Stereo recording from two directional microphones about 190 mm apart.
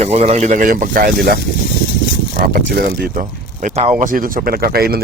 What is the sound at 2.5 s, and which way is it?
Speech, 50° right (ahead or behind).